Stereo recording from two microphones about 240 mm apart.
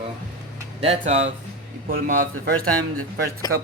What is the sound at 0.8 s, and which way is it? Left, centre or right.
Speech, right.